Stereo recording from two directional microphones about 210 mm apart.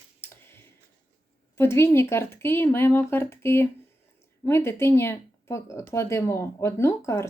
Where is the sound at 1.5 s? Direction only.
10° left (ahead or behind).